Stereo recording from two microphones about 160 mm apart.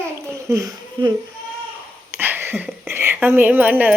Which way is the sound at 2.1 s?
10° right (ahead or behind).